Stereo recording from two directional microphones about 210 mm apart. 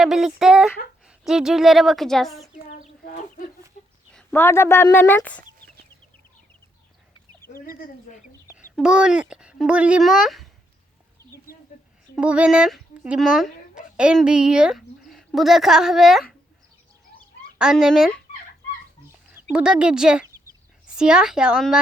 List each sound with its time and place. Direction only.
0.0 s speech: centre (ahead or behind)
4.1 s speech: 5° left (ahead or behind)
7.4 s speech: 45° left (ahead or behind)
8.5 s speech: 5° right (ahead or behind)
12.1 s speech: 5° right (ahead or behind)
17.6 s speech: 5° right (ahead or behind)
19.5 s a woman's voice: 5° right (ahead or behind)